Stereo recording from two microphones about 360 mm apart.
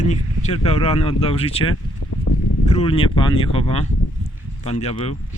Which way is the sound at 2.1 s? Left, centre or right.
Left.